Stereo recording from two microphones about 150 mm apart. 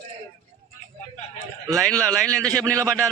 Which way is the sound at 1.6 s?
Centre (ahead or behind).